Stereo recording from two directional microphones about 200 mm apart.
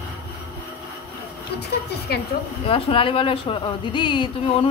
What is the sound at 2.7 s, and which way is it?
Speech, 25° left (ahead or behind).